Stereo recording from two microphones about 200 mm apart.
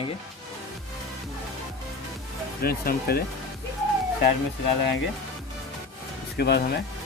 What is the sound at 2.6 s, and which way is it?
Speech, 50° left (ahead or behind).